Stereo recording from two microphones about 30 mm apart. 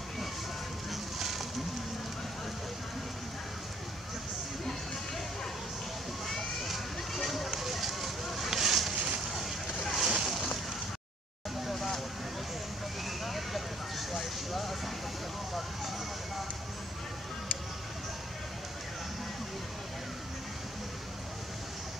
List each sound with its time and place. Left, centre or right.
6.2 s a sound: centre
7.5 s vehicle: centre
8.9 s a sound: right
9.3 s boat: centre
9.8 s vehicle: centre
11.6 s vehicle: centre
13.0 s vehicle: centre